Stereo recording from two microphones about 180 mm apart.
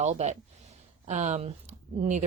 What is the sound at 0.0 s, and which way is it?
A woman's voice, 40° right (ahead or behind).